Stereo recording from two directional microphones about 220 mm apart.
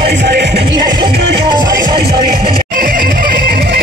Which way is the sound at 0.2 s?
50° right (ahead or behind).